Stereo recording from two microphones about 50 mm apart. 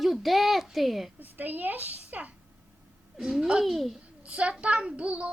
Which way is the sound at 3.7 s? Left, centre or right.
Centre.